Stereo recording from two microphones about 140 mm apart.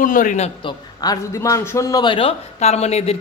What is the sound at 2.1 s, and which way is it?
A woman's voice, 45° left (ahead or behind).